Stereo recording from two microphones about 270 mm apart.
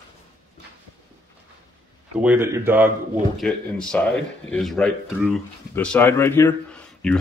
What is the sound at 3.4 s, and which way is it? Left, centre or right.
Speech, centre.